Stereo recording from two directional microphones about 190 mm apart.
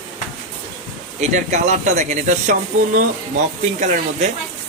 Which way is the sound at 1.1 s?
40° right (ahead or behind).